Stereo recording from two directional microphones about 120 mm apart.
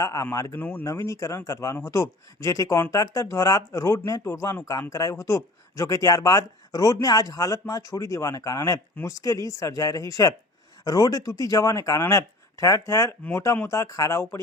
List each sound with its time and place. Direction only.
0.0 s speech: 25° left (ahead or behind)
0.9 s speech: 25° left (ahead or behind)